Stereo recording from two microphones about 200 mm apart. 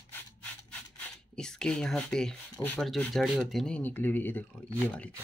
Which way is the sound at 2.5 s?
10° left (ahead or behind).